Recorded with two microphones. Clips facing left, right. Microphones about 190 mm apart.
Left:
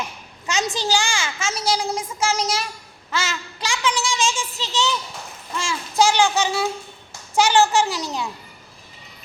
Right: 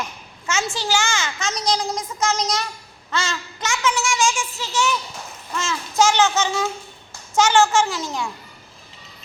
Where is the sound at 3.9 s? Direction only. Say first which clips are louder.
Right 2 dB; 20° left (ahead or behind).